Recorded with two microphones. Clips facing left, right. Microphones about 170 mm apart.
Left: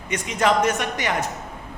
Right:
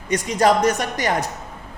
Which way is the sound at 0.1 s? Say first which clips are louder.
Right 4 dB; 40° right (ahead or behind).